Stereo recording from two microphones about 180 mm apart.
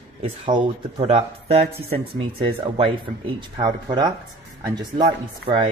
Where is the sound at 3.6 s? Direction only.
25° right (ahead or behind).